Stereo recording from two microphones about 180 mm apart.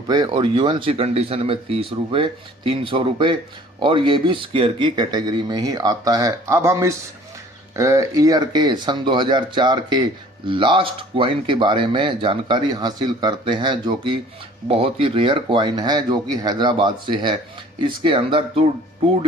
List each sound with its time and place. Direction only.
0.1 s speech: 25° right (ahead or behind)